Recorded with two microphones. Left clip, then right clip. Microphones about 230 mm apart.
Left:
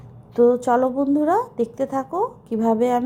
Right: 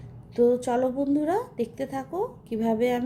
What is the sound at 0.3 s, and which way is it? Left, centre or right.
A woman's voice, centre.